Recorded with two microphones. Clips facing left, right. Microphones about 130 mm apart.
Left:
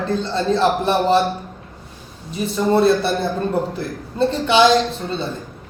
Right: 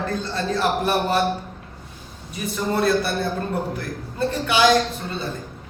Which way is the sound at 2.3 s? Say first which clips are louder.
Left 7 dB; 25° left (ahead or behind).